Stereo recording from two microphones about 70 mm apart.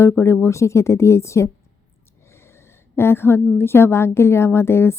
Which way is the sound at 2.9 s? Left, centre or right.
Left.